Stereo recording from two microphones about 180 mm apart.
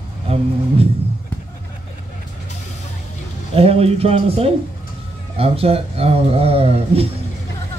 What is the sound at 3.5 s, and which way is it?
Speech, 35° right (ahead or behind).